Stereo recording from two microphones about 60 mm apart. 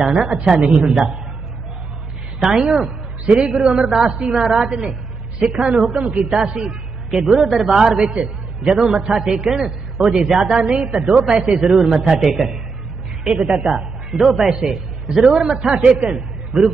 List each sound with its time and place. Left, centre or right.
0.0 s a man's voice: centre
2.4 s speech: centre
3.3 s a man's voice: centre
5.7 s speech: centre
6.4 s a man's voice: centre
11.7 s a man's voice: centre
15.4 s a man's voice: centre